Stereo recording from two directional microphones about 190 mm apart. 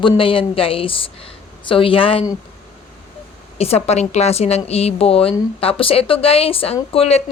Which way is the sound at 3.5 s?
35° left (ahead or behind).